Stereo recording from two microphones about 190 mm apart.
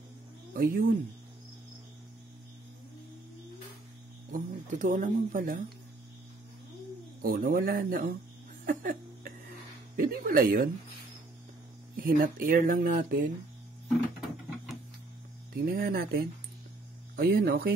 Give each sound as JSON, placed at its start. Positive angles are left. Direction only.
{"t": 0.5, "sound": "speech", "side_deg": -50}
{"t": 4.3, "sound": "speech", "side_deg": -40}
{"t": 7.2, "sound": "speech", "side_deg": -50}
{"t": 8.6, "sound": "a sound", "side_deg": -50}
{"t": 9.9, "sound": "speech", "side_deg": -50}
{"t": 12.0, "sound": "speech", "side_deg": -45}
{"t": 15.5, "sound": "speech", "side_deg": -55}